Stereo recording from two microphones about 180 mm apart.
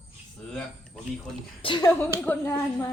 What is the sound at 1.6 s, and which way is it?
Speech, 25° left (ahead or behind).